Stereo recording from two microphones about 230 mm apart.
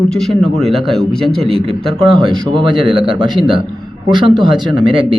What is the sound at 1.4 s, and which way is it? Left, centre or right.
Speech, right.